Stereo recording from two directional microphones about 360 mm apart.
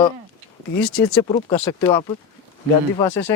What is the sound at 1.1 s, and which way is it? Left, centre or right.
Speech, centre.